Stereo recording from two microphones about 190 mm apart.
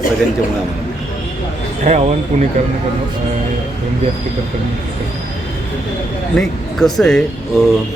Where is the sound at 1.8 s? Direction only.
35° right (ahead or behind).